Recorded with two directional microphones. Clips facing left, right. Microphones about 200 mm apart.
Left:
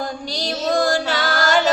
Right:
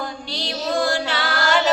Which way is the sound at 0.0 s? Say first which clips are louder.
Left 3 dB; 40° left (ahead or behind).